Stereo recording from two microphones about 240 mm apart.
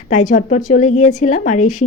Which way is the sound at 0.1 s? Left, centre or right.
Left.